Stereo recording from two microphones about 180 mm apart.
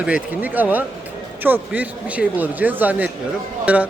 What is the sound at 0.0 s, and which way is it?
Speech, 10° right (ahead or behind).